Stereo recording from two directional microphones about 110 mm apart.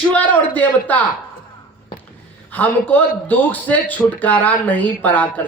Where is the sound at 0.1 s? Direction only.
15° left (ahead or behind).